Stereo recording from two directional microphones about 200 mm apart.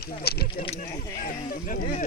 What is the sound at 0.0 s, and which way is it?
Speech, 50° left (ahead or behind).